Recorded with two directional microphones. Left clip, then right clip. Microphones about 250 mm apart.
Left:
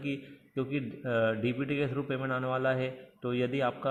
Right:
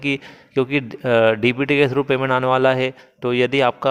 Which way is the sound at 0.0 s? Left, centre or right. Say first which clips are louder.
Right 14 dB; right.